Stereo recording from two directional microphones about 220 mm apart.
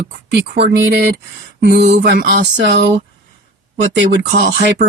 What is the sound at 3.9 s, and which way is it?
Speech, 50° right (ahead or behind).